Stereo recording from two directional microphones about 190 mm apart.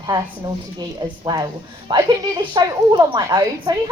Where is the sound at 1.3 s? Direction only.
20° right (ahead or behind).